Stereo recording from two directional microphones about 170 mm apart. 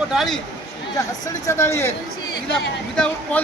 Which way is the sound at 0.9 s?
20° left (ahead or behind).